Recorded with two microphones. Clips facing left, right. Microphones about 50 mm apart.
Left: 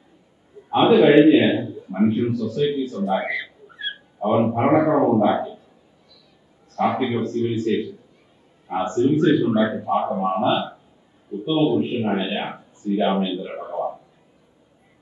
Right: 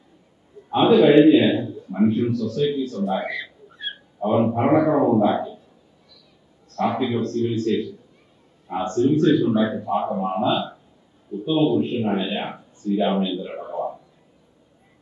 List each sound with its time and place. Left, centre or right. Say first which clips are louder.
0.7 s a man's voice: left 1 dB; centre
6.7 s a man's voice: left 1 dB; centre